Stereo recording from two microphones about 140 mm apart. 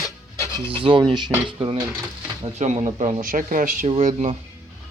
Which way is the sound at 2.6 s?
55° right (ahead or behind).